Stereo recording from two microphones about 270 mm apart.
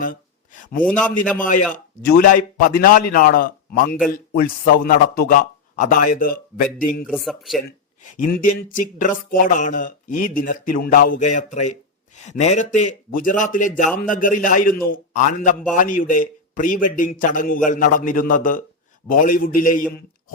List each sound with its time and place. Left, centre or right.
0.0 s a sound: left
0.9 s speech: centre
1.4 s a man's voice: left
7.1 s speech: centre
8.1 s a man's voice: left